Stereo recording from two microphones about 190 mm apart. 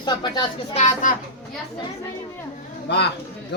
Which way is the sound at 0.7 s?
40° left (ahead or behind).